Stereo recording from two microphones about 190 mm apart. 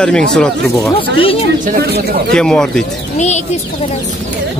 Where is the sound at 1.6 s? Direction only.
55° right (ahead or behind).